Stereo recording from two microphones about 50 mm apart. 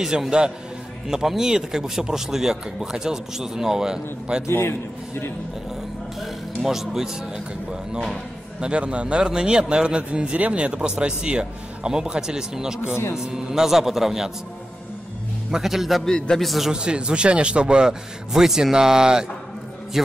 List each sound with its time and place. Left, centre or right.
0.0 s a man's voice: centre
4.5 s a man's voice: left
6.6 s a man's voice: centre
8.5 s speech: right
12.9 s a man's voice: left
13.2 s a man's voice: centre
15.5 s a man's voice: centre
16.1 s a man's voice: centre
16.4 s a man's voice: centre
16.7 s a man's voice: centre